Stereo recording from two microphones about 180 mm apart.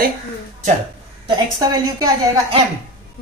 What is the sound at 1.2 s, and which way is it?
Speech, 20° right (ahead or behind).